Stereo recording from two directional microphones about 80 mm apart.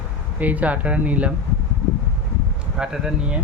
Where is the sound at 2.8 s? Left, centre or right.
Centre.